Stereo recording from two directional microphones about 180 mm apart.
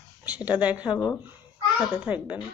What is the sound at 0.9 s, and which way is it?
Speech, 20° left (ahead or behind).